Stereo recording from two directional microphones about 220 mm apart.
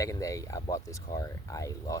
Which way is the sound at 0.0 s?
15° left (ahead or behind).